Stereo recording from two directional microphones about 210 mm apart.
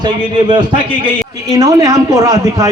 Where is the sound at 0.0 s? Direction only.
20° right (ahead or behind).